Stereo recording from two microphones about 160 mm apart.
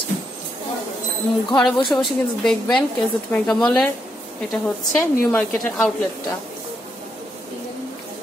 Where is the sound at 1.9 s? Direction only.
Centre (ahead or behind).